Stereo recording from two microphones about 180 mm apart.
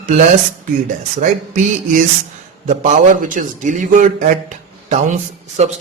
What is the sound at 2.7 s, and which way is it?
A man's voice, 45° right (ahead or behind).